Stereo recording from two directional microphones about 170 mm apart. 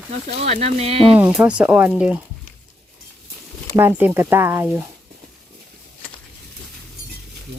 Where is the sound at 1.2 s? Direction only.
10° right (ahead or behind).